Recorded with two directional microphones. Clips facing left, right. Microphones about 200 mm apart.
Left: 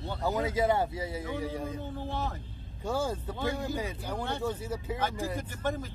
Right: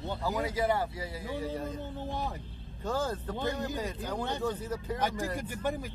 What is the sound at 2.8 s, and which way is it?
Speech, 10° left (ahead or behind).